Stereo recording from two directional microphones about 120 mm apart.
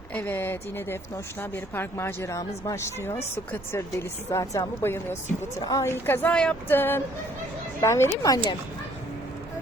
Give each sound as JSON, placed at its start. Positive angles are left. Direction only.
{"t": 0.1, "sound": "a woman's voice", "side_deg": 15}
{"t": 5.9, "sound": "a woman's voice", "side_deg": 15}